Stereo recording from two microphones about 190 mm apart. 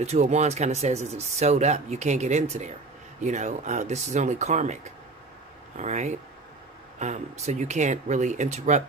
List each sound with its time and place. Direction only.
0.0 s speech: 35° right (ahead or behind)
5.8 s speech: 40° right (ahead or behind)